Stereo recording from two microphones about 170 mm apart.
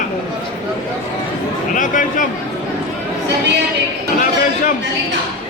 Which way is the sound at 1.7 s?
50° left (ahead or behind).